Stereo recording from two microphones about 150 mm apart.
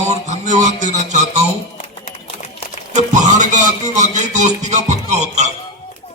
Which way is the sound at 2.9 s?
55° right (ahead or behind).